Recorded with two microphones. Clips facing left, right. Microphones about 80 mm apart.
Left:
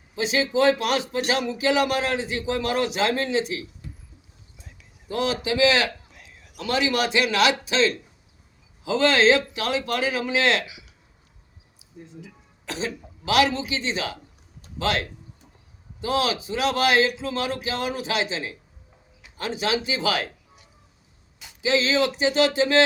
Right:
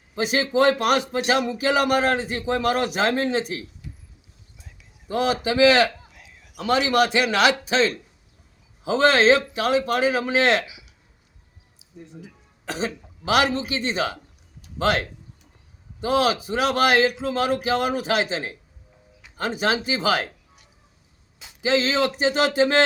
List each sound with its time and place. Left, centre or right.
0.2 s a man's voice: right
5.0 s a man's voice: right
6.1 s a sound: centre
6.7 s a man's voice: right
13.2 s a man's voice: right
21.6 s a man's voice: right